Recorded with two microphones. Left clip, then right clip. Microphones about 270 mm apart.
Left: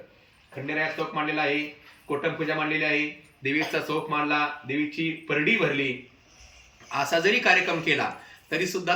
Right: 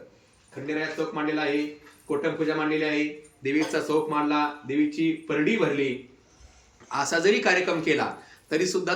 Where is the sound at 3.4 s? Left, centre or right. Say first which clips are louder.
Right 1 dB; centre.